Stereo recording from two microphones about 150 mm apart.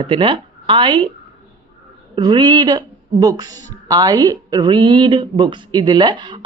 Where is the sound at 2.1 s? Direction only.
30° right (ahead or behind).